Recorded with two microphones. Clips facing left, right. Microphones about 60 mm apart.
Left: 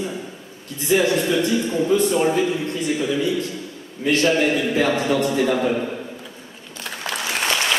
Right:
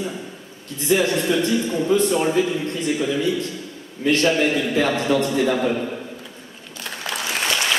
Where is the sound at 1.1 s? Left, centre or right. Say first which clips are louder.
Even; centre.